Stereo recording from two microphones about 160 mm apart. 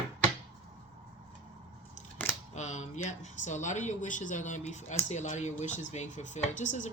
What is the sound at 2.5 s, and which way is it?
Speech, 50° left (ahead or behind).